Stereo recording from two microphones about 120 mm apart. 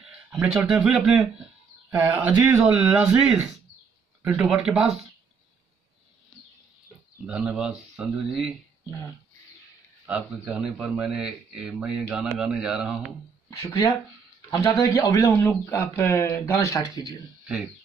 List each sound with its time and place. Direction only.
0.0 s speech: 5° right (ahead or behind)
7.2 s speech: 10° right (ahead or behind)
10.0 s speech: 10° right (ahead or behind)
13.5 s speech: 30° left (ahead or behind)